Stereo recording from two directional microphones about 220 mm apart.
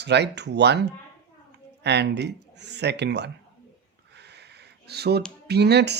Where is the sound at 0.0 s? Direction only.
50° right (ahead or behind).